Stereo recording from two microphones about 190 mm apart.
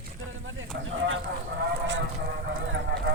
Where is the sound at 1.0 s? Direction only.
90° right.